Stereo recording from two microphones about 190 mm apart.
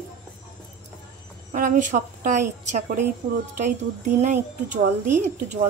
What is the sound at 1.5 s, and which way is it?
A woman's voice, 40° right (ahead or behind).